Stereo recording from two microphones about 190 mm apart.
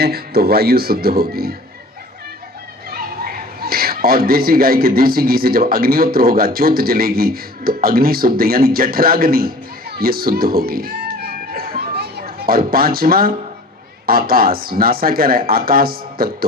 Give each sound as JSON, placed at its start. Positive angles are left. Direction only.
{"t": 0.0, "sound": "speech", "side_deg": -55}
{"t": 2.9, "sound": "speech", "side_deg": -50}
{"t": 10.0, "sound": "music", "side_deg": -50}
{"t": 14.1, "sound": "speech", "side_deg": -50}